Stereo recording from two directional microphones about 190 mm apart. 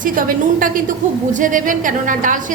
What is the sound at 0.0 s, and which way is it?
A woman's voice, 45° right (ahead or behind).